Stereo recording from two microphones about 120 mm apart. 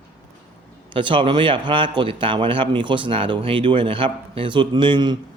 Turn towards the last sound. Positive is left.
turn(degrees=-40)  # may be behind; listen again after turning